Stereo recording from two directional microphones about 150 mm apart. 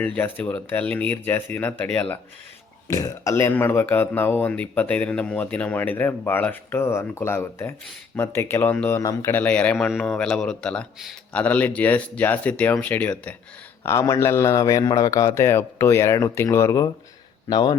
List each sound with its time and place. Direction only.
0.0 s speech: 10° left (ahead or behind)
2.9 s a man's voice: 20° left (ahead or behind)